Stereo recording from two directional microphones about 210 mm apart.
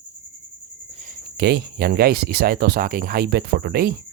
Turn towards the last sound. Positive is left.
turn(degrees=-50)  # may be behind; listen again after turning